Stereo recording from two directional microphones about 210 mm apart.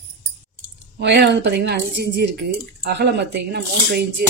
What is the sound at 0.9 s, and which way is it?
Speech, 55° right (ahead or behind).